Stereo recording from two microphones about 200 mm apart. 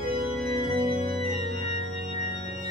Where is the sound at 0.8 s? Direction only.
50° right (ahead or behind).